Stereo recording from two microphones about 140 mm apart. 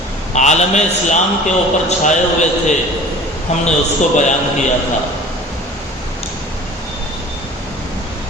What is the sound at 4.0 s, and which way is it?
Speech, 60° left (ahead or behind).